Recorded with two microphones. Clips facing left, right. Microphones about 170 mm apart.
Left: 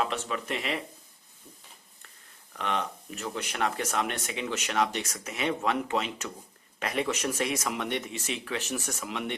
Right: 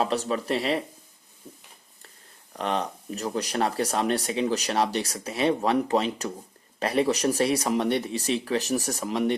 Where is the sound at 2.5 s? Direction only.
35° right (ahead or behind).